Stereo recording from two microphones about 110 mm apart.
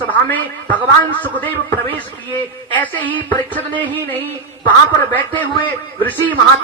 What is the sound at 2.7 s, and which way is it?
A man's voice, 15° left (ahead or behind).